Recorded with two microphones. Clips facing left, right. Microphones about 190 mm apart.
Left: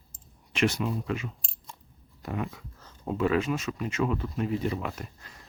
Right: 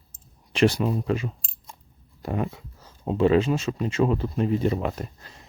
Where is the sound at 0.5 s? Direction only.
35° right (ahead or behind).